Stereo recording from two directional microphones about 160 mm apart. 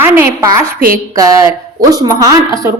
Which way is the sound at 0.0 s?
15° right (ahead or behind).